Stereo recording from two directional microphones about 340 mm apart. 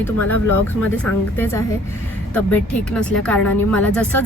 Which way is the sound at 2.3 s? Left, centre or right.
Centre.